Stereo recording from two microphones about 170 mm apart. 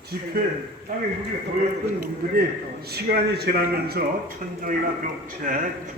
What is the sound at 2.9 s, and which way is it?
A man's voice, 70° right (ahead or behind).